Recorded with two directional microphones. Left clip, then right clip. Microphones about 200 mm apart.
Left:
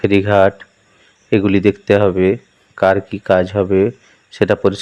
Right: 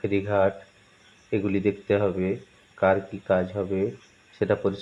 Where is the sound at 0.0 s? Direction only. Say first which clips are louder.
Left 11 dB; 45° left (ahead or behind).